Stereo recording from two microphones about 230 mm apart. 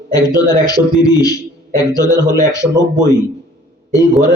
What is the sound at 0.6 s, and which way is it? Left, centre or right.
A man's voice, centre.